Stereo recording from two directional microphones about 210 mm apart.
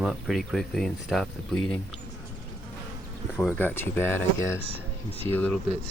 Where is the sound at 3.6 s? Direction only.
10° left (ahead or behind).